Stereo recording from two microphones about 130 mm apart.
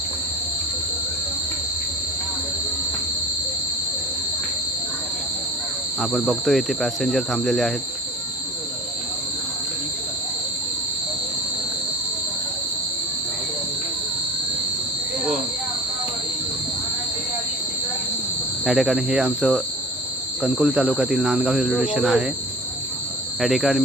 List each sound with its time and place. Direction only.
6.0 s speech: centre (ahead or behind)
18.6 s speech: centre (ahead or behind)
23.4 s speech: centre (ahead or behind)